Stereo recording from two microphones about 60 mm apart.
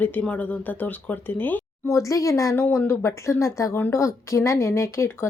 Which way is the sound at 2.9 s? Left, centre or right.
Left.